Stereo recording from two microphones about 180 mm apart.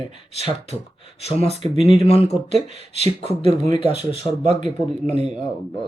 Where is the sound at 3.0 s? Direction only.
35° right (ahead or behind).